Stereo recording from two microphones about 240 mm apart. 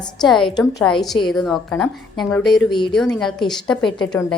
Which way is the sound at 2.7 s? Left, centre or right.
Centre.